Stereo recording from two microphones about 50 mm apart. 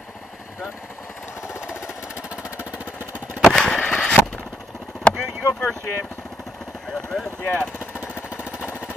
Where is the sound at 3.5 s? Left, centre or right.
Centre.